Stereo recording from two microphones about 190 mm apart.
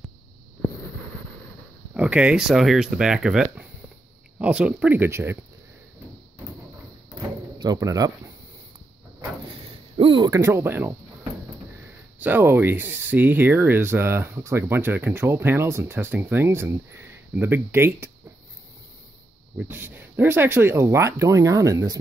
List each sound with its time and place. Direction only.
2.0 s speech: 5° right (ahead or behind)
7.2 s door: 20° right (ahead or behind)
9.9 s speech: 25° right (ahead or behind)
19.5 s speech: 10° right (ahead or behind)